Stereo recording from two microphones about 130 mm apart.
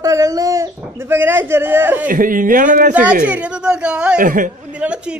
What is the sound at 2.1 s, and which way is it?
Speech, 90° right.